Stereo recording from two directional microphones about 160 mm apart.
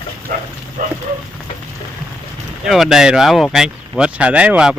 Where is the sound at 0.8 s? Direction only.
60° right (ahead or behind).